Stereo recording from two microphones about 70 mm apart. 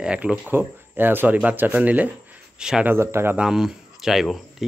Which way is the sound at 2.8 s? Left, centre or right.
Right.